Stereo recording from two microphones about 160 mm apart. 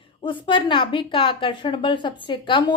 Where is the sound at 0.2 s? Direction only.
30° left (ahead or behind).